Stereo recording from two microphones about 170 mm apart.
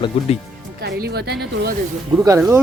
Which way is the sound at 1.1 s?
70° right (ahead or behind).